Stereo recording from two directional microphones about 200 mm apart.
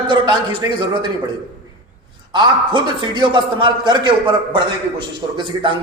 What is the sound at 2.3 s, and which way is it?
A man's voice, 25° right (ahead or behind).